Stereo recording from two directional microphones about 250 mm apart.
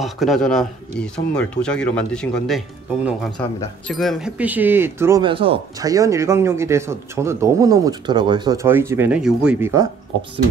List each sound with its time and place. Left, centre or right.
0.0 s speech: centre
3.8 s speech: centre